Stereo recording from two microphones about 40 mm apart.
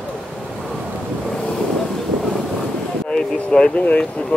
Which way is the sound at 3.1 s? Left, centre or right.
Left.